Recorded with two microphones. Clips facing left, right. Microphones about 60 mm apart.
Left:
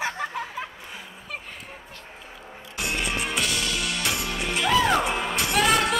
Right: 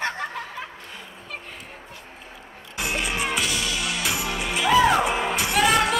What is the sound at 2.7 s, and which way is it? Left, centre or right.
Music, centre.